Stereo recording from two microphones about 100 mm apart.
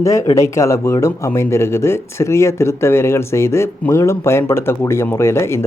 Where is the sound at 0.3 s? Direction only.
30° left (ahead or behind).